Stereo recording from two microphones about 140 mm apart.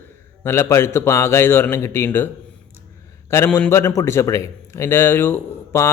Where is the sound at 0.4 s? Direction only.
15° left (ahead or behind).